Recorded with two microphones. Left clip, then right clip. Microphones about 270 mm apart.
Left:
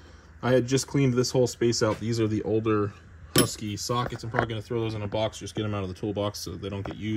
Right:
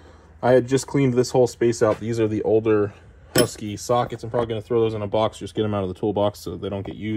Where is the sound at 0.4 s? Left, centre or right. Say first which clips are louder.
Right 6 dB; centre.